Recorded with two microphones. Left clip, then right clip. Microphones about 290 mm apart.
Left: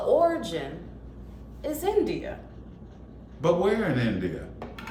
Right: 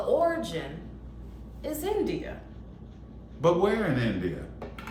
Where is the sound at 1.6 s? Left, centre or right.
Centre.